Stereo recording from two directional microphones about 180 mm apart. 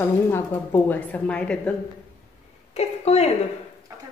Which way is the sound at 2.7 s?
35° left (ahead or behind).